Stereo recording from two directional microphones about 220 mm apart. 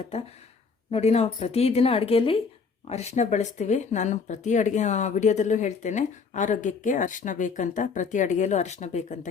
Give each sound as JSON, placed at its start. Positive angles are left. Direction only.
{"t": 0.9, "sound": "speech", "side_deg": 30}